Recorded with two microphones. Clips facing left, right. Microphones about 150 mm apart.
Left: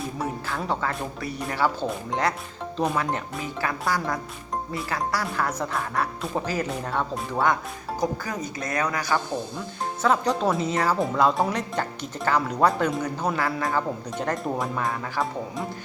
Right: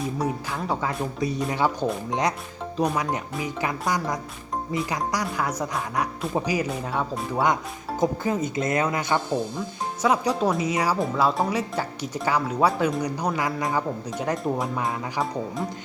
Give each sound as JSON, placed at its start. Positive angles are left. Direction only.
{"t": 0.2, "sound": "speech", "side_deg": -15}
{"t": 7.4, "sound": "speech", "side_deg": -20}
{"t": 10.0, "sound": "speech", "side_deg": -10}
{"t": 11.0, "sound": "speech", "side_deg": 0}
{"t": 14.1, "sound": "speech", "side_deg": -5}
{"t": 14.8, "sound": "speech", "side_deg": -20}